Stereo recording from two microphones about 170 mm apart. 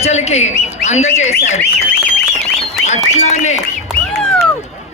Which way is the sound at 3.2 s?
40° left (ahead or behind).